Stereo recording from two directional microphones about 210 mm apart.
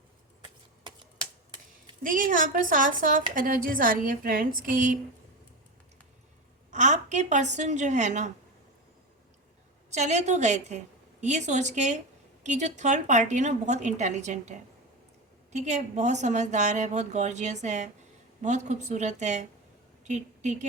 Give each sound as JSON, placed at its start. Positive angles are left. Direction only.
{"t": 2.0, "sound": "a woman's voice", "side_deg": -40}
{"t": 6.7, "sound": "a woman's voice", "side_deg": -35}
{"t": 9.9, "sound": "a woman's voice", "side_deg": -35}
{"t": 15.5, "sound": "a woman's voice", "side_deg": -35}